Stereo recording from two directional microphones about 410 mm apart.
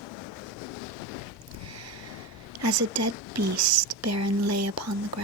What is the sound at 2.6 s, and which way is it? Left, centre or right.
Speech, right.